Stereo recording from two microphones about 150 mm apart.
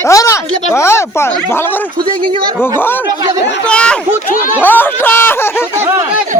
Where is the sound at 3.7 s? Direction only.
5° left (ahead or behind).